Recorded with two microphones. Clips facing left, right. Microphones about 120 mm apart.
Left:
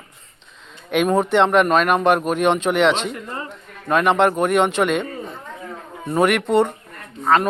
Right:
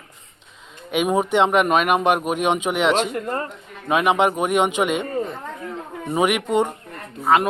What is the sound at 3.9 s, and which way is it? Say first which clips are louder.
Speech: left 2 dB; 10° right (ahead or behind).